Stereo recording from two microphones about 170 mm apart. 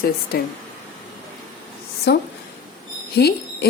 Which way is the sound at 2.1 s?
75° left (ahead or behind).